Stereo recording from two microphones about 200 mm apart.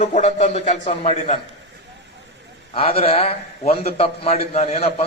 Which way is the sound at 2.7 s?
30° left (ahead or behind).